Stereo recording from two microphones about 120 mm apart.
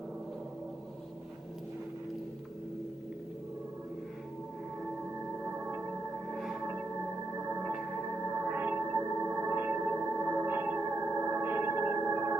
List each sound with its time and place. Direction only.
6.3 s music: centre (ahead or behind)
8.4 s music: 15° right (ahead or behind)